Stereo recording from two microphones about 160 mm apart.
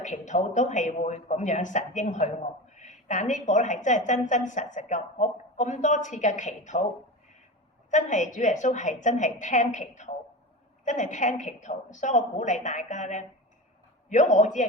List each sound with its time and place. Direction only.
0.0 s a woman's voice: 50° left (ahead or behind)
7.9 s a woman's voice: 50° left (ahead or behind)